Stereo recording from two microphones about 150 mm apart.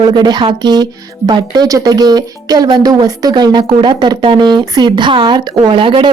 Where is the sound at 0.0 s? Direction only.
30° right (ahead or behind).